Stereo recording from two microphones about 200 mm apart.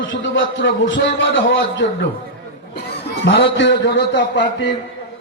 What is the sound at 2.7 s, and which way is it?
A man's voice, 55° left (ahead or behind).